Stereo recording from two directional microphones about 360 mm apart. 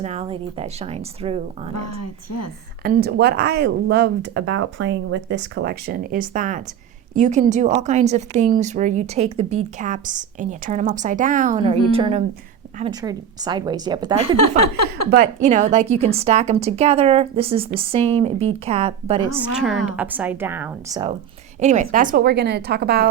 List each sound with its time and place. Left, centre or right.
0.0 s a woman's voice: centre
1.7 s a woman's voice: left
2.8 s a woman's voice: right
14.3 s a woman's voice: left
15.1 s a woman's voice: right
20.0 s a woman's voice: centre; by 23.0 s right